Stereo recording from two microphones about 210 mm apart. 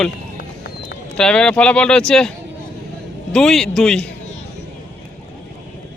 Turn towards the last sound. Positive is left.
turn(degrees=5)  # may be behind; listen again after turning